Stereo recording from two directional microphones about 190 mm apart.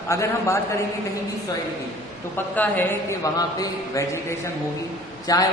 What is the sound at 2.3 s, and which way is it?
A man's voice, 10° left (ahead or behind).